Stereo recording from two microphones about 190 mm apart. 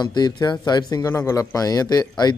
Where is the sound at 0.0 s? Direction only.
20° left (ahead or behind).